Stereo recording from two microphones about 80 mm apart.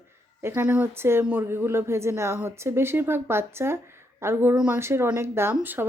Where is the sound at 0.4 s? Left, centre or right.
Right.